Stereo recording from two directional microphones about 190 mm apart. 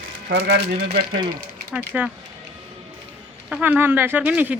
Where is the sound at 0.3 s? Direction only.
60° right (ahead or behind).